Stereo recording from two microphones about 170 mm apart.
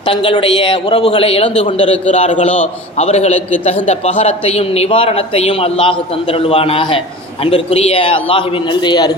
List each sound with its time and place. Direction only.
0.0 s a man's voice: 30° left (ahead or behind)